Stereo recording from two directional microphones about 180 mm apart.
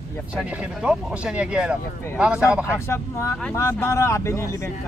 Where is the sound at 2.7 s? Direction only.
15° left (ahead or behind).